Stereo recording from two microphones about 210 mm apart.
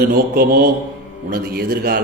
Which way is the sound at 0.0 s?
45° right (ahead or behind).